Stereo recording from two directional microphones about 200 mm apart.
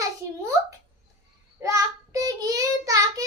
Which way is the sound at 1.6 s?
15° right (ahead or behind).